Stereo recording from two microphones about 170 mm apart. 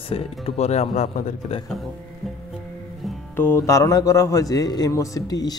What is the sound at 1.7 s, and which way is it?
Speech, centre (ahead or behind).